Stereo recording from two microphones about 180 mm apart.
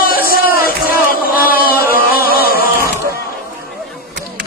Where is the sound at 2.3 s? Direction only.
55° left (ahead or behind).